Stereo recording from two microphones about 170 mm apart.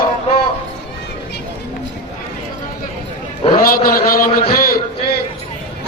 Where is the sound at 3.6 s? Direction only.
55° left (ahead or behind).